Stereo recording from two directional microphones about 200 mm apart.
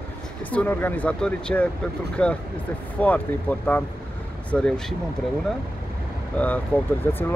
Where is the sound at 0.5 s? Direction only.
10° left (ahead or behind).